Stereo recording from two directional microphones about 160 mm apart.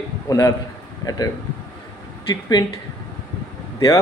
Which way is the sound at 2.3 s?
25° left (ahead or behind).